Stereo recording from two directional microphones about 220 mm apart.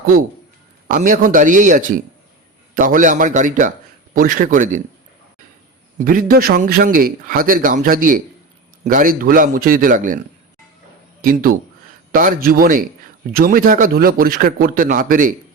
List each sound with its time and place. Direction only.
0.0 s a man's voice: 40° right (ahead or behind)
6.0 s a man's voice: 40° right (ahead or behind)
11.2 s a man's voice: 40° right (ahead or behind)